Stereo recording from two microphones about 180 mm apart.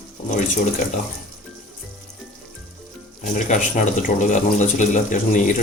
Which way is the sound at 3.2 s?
45° left (ahead or behind).